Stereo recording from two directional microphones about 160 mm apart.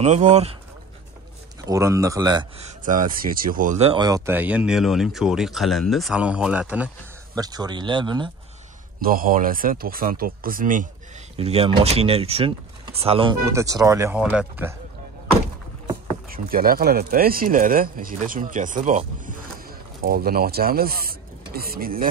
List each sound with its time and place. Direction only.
0.0 s speech: 45° right (ahead or behind)
1.6 s speech: 20° right (ahead or behind)
2.6 s speech: 55° right (ahead or behind)
3.8 s speech: 30° right (ahead or behind)
4.3 s speech: 10° right (ahead or behind)
7.3 s speech: 25° right (ahead or behind)
9.0 s speech: 60° right (ahead or behind)
11.3 s speech: 40° right (ahead or behind)
13.4 s speech: 20° right (ahead or behind)
14.1 s speech: 5° right (ahead or behind)
16.3 s speech: 65° right (ahead or behind)